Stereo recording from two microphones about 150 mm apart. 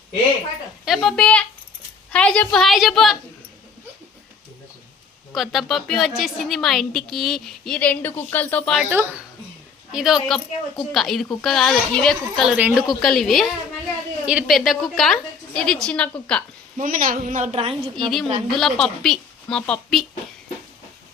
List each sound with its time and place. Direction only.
0.9 s a woman's voice: 5° left (ahead or behind)
5.3 s a woman's voice: centre (ahead or behind)
8.9 s a child's voice: 15° right (ahead or behind)
9.9 s a woman's voice: 5° right (ahead or behind)
12.5 s a child's voice: 10° right (ahead or behind)
13.0 s a woman's voice: centre (ahead or behind)
16.7 s speech: 65° right (ahead or behind); by 17.7 s 45° right (ahead or behind)
17.9 s a woman's voice: centre (ahead or behind)